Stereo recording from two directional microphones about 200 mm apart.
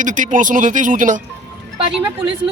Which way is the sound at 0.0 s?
40° right (ahead or behind).